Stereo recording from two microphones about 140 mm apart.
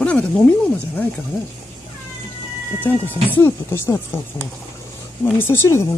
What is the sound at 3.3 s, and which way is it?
Speech, 15° left (ahead or behind).